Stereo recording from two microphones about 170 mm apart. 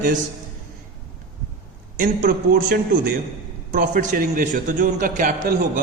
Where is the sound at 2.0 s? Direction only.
55° right (ahead or behind).